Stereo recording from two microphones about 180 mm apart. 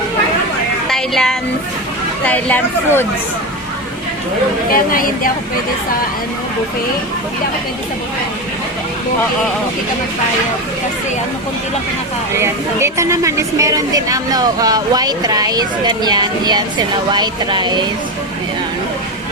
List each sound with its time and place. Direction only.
0.9 s music: centre (ahead or behind)
2.2 s speech: 10° left (ahead or behind)
4.7 s a woman's voice: 50° left (ahead or behind)
12.4 s a woman's voice: 15° right (ahead or behind)